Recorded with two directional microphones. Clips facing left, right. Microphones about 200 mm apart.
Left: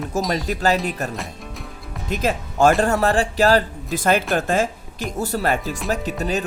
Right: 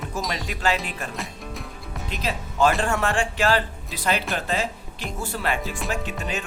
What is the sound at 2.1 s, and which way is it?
Speech, 45° left (ahead or behind).